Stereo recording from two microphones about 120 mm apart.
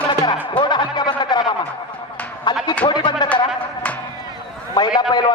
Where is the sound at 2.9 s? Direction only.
40° left (ahead or behind).